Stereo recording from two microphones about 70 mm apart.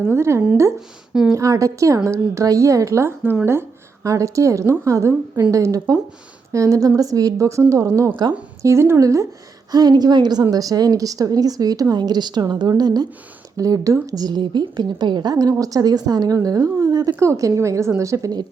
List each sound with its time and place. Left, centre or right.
0.1 s speech: right
1.4 s a woman's voice: right
4.0 s a woman's voice: right
9.7 s a woman's voice: right
10.5 s a woman's voice: right
13.6 s a woman's voice: right
14.3 s a woman's voice: right
15.4 s a woman's voice: right
17.2 s a woman's voice: right